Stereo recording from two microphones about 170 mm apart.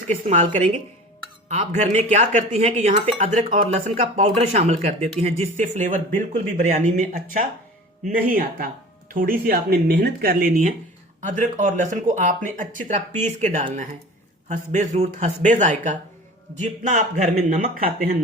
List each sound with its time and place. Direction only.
0.3 s speech: 45° right (ahead or behind)